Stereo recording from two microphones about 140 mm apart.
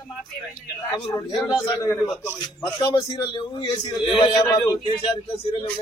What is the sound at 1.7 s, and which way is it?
Speech, 20° left (ahead or behind).